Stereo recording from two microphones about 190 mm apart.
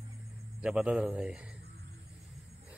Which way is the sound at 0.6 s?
5° right (ahead or behind).